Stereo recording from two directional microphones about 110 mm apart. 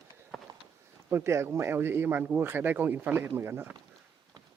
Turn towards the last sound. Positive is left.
turn(degrees=-20)  # may be behind; listen again after turning